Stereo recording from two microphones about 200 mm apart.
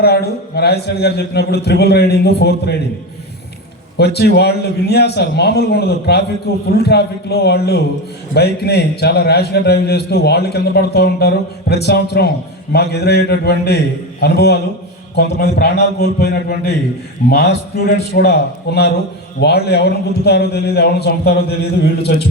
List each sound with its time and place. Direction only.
0.0 s a man's voice: 50° left (ahead or behind)
3.9 s a man's voice: 55° left (ahead or behind)